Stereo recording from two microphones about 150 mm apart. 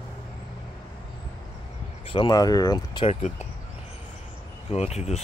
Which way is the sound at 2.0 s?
30° left (ahead or behind).